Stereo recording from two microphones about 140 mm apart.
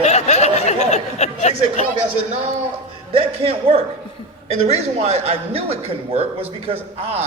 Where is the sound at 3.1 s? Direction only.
45° right (ahead or behind).